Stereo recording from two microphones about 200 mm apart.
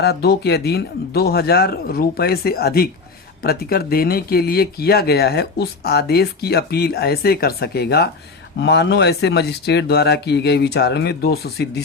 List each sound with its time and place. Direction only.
0.0 s speech: 55° left (ahead or behind)